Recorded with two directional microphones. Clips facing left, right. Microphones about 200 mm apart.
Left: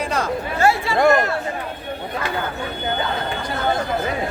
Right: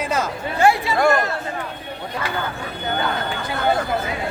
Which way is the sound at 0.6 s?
15° right (ahead or behind).